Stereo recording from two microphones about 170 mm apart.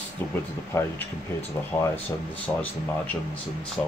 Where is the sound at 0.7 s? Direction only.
15° left (ahead or behind).